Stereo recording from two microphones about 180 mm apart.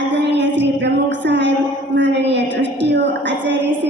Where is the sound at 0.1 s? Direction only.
80° right.